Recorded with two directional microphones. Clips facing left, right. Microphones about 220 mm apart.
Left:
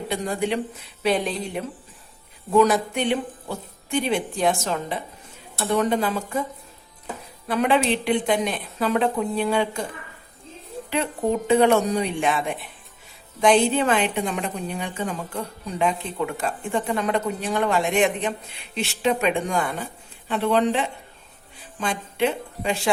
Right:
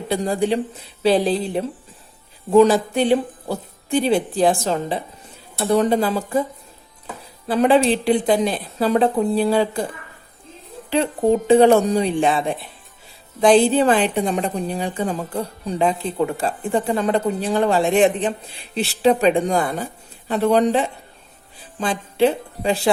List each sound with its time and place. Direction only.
0.1 s a woman's voice: 35° right (ahead or behind)
10.8 s a woman's voice: 30° right (ahead or behind)